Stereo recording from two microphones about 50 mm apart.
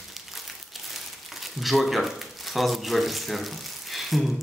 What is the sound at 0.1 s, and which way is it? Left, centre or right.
Crumpling, centre.